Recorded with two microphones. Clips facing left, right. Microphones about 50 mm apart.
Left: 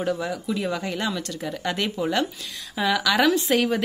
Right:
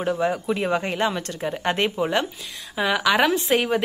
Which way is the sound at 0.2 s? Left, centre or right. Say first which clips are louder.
Right 4 dB; right.